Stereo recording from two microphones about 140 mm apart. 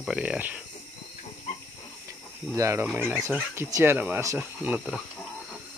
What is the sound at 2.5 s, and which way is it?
Speech, 20° right (ahead or behind).